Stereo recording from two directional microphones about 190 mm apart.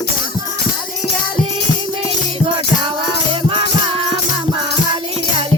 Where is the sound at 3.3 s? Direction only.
30° right (ahead or behind).